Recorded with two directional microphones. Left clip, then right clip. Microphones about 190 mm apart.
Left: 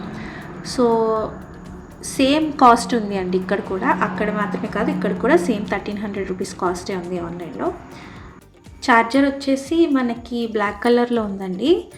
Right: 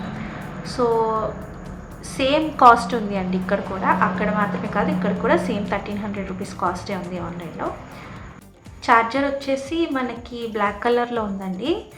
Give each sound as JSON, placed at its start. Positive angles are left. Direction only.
{"t": 0.6, "sound": "speech", "side_deg": 35}
{"t": 2.1, "sound": "a woman's voice", "side_deg": 40}
{"t": 8.8, "sound": "a woman's voice", "side_deg": 40}